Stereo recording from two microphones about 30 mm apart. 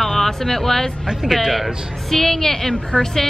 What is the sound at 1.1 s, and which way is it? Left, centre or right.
Speech, centre.